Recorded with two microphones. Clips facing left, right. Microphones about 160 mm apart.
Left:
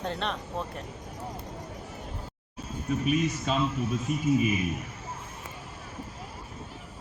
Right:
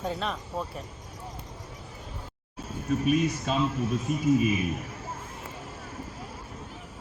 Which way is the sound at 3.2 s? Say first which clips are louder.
Even; 5° right (ahead or behind).